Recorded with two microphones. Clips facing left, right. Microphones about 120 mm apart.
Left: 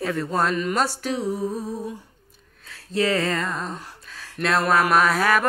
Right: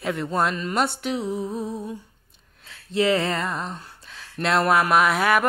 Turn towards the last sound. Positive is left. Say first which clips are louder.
# even
turn(degrees=-20)  # may be behind; listen again after turning